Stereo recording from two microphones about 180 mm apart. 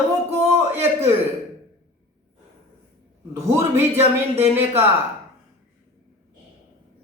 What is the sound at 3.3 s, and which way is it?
A man's voice, 15° right (ahead or behind).